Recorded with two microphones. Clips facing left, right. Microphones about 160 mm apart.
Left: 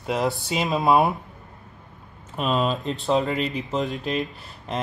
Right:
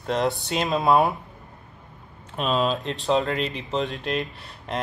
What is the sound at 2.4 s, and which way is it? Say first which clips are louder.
Speech: even; centre (ahead or behind).